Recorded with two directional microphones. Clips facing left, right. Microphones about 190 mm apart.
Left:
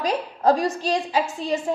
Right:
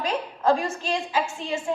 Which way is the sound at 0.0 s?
35° left (ahead or behind).